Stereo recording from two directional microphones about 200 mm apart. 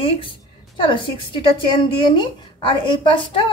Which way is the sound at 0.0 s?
25° left (ahead or behind).